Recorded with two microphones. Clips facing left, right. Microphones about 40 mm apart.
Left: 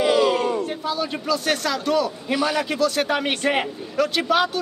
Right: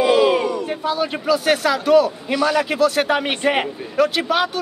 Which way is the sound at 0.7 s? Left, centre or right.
Centre.